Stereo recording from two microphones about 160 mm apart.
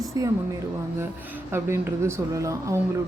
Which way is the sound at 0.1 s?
20° right (ahead or behind).